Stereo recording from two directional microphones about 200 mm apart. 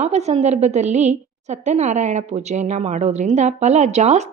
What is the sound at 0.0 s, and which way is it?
A woman's voice, 35° right (ahead or behind).